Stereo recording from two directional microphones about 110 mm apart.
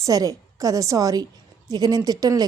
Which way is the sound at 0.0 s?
30° right (ahead or behind).